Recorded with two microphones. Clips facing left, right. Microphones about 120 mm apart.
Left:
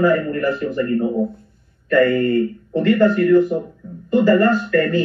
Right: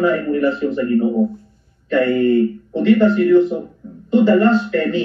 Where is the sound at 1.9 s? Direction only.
20° right (ahead or behind).